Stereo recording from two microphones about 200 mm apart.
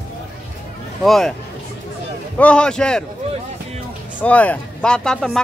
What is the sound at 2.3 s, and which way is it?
Speech, 5° left (ahead or behind).